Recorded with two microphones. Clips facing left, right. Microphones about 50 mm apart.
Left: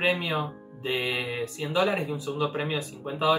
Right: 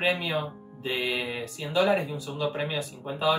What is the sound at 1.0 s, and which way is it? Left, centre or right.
Music, centre.